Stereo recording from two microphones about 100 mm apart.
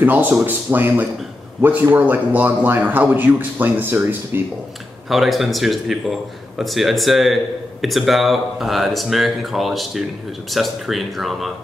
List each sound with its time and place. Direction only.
0.0 s speech: 20° right (ahead or behind)
5.1 s speech: centre (ahead or behind)